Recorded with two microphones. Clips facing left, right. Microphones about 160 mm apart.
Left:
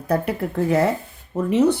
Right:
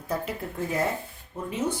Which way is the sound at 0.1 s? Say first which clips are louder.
Left 9 dB; 70° left (ahead or behind).